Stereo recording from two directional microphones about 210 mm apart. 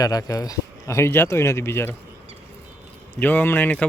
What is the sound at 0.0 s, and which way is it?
Speech, 15° left (ahead or behind).